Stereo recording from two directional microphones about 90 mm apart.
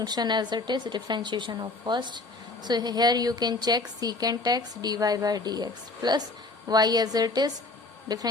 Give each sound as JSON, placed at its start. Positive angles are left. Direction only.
{"t": 0.0, "sound": "a woman's voice", "side_deg": -50}